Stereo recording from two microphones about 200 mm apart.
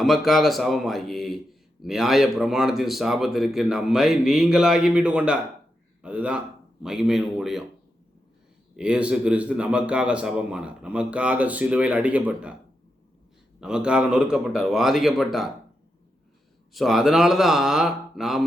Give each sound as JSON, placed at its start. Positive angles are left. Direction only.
{"t": 0.0, "sound": "speech", "side_deg": 0}
{"t": 8.7, "sound": "speech", "side_deg": -5}
{"t": 13.6, "sound": "speech", "side_deg": -5}
{"t": 16.7, "sound": "speech", "side_deg": 0}